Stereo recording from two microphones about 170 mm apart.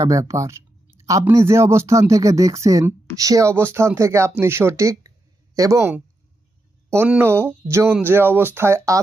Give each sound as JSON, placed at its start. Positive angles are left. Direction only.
{"t": 0.0, "sound": "speech", "side_deg": -20}